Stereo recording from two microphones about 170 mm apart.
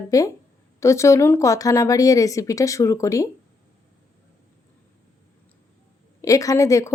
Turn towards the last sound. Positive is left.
turn(degrees=20)  # may be behind; listen again after turning